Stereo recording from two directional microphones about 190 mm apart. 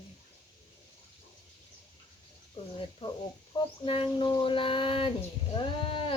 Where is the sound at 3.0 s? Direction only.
25° left (ahead or behind).